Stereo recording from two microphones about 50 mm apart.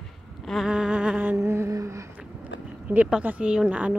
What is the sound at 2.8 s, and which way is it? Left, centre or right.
Speech, right.